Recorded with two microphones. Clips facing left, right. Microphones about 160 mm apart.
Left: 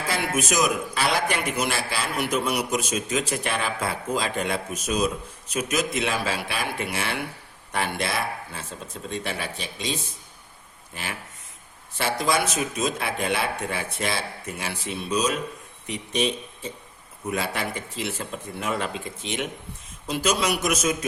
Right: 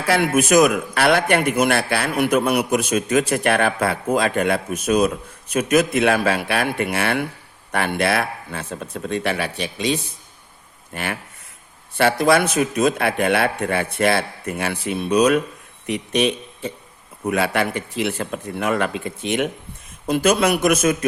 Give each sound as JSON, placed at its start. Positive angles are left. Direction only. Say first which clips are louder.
{"t": 0.1, "sound": "a man's voice", "louder": "right 10 dB", "side_deg": -60}
{"t": 12.2, "sound": "a man's voice", "louder": "right 6 dB", "side_deg": -60}